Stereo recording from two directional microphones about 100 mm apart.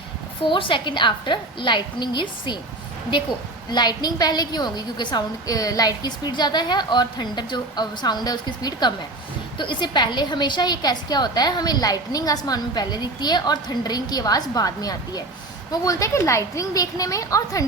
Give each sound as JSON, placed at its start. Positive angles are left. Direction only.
{"t": 0.4, "sound": "a woman's voice", "side_deg": 55}
{"t": 3.7, "sound": "a woman's voice", "side_deg": 45}